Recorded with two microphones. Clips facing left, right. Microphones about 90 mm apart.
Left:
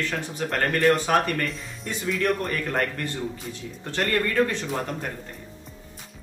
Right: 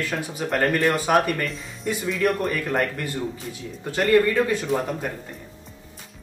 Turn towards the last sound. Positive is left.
turn(degrees=-5)  # may be behind; listen again after turning